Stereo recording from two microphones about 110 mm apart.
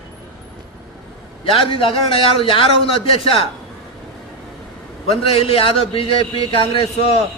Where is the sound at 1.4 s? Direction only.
55° left (ahead or behind).